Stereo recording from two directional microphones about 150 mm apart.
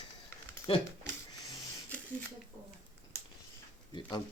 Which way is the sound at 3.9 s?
30° left (ahead or behind).